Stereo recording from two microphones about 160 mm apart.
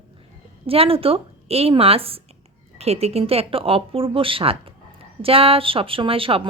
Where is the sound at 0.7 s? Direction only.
35° right (ahead or behind).